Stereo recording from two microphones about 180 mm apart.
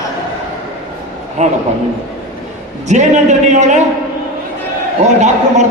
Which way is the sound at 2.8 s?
40° right (ahead or behind).